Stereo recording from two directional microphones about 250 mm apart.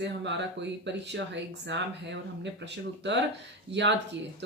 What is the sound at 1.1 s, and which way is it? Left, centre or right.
Speech, right.